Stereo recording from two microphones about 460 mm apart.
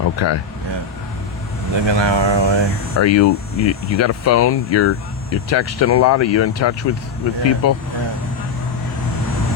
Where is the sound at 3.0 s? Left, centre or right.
Left.